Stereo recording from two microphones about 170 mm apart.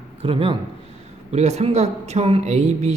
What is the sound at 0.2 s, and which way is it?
Speech, 30° right (ahead or behind).